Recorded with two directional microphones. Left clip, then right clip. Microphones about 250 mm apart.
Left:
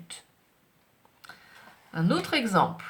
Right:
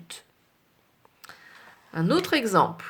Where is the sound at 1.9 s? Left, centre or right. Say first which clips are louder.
Right 3 dB; right.